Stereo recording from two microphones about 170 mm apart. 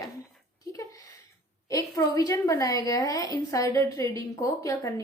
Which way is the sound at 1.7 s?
20° left (ahead or behind).